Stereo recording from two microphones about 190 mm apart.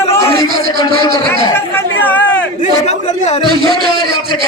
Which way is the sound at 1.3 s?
10° left (ahead or behind).